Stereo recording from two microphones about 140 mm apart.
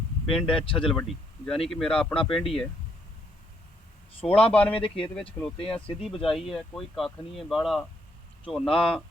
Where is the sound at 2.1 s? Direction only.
40° left (ahead or behind).